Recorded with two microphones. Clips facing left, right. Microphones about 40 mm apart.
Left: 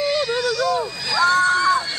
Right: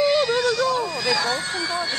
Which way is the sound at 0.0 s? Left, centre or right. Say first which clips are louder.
Right 2 dB; centre.